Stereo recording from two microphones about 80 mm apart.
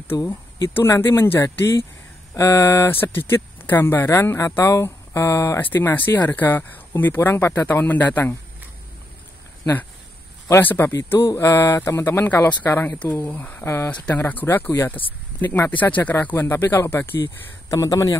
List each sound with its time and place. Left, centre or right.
0.1 s speech: left
0.8 s speech: left
2.3 s speech: left
2.9 s speech: left
5.6 s a man's voice: left
10.6 s a man's voice: left
11.2 s a man's voice: left
17.6 s speech: left